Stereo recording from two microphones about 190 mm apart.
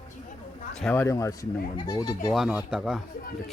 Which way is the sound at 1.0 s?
15° left (ahead or behind).